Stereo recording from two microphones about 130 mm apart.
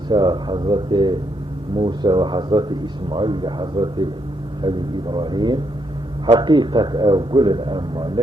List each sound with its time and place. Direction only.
0.1 s a man's voice: 35° right (ahead or behind)